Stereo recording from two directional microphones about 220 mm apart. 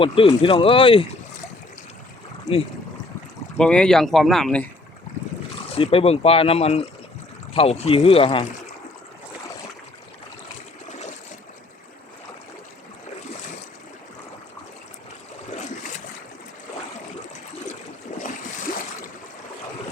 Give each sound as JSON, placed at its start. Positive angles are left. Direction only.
{"t": 0.0, "sound": "speech", "side_deg": 25}
{"t": 3.6, "sound": "speech", "side_deg": 5}
{"t": 5.7, "sound": "speech", "side_deg": 25}
{"t": 18.1, "sound": "boat", "side_deg": 30}